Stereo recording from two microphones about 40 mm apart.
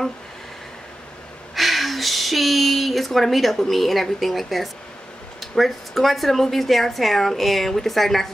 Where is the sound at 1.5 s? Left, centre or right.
Centre.